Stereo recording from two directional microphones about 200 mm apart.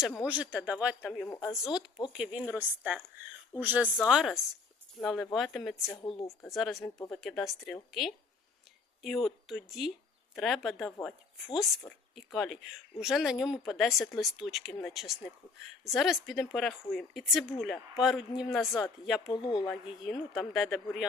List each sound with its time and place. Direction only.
0.2 s a woman's voice: 5° right (ahead or behind)
3.6 s a woman's voice: 10° right (ahead or behind)
5.8 s a woman's voice: 20° left (ahead or behind)
6.4 s a woman's voice: centre (ahead or behind)
19.3 s a woman's voice: 20° left (ahead or behind)
19.6 s a woman's voice: 5° left (ahead or behind)